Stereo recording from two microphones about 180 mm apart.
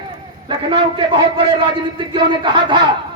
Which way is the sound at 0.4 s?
25° right (ahead or behind).